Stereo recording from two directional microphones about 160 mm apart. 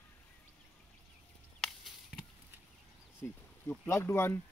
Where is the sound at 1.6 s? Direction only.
5° left (ahead or behind).